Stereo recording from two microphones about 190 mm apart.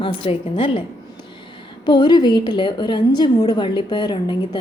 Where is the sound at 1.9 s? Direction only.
20° left (ahead or behind).